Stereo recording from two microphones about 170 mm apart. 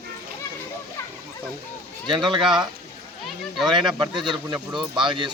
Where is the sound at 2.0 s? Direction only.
25° right (ahead or behind).